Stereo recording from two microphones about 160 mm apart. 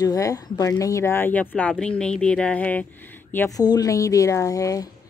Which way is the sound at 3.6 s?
25° left (ahead or behind).